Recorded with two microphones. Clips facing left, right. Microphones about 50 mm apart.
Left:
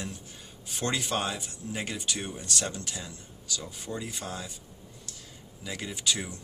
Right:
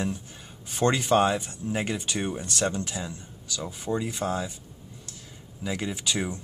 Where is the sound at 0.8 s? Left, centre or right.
Right.